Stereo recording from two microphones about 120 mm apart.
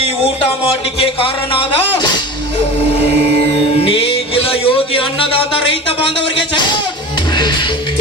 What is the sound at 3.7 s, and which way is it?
Music, 50° left (ahead or behind).